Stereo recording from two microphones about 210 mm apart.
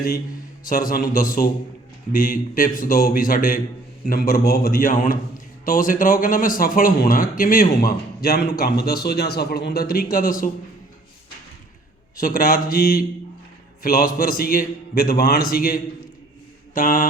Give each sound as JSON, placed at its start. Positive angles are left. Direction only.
{"t": 0.6, "sound": "a man's voice", "side_deg": 40}
{"t": 12.1, "sound": "a man's voice", "side_deg": 40}